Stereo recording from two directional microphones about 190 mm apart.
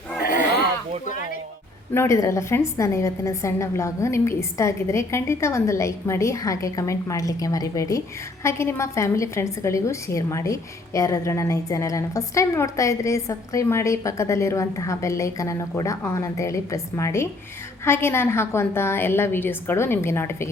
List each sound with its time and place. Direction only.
0.2 s a sound: 50° left (ahead or behind)
1.0 s music: 40° left (ahead or behind)
1.9 s a woman's voice: 15° left (ahead or behind)